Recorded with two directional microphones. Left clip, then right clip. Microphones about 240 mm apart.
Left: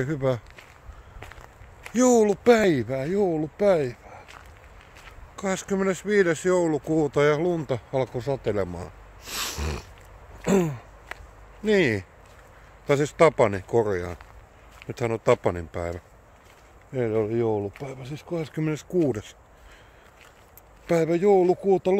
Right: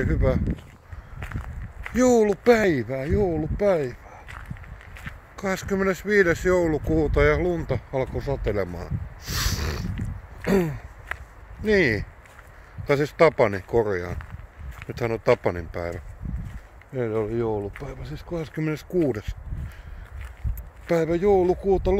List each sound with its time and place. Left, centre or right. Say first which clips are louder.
0.0 s speech: right 1 dB; centre
1.9 s speech: even; centre
5.3 s speech: right 1 dB; centre
8.5 s a sound: even; centre
10.4 s speech: even; centre
20.8 s speech: even; centre